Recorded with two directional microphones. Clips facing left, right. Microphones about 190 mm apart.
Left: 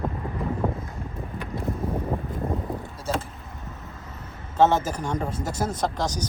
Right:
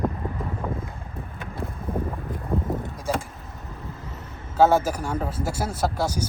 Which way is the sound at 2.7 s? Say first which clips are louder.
Right 2 dB; 15° right (ahead or behind).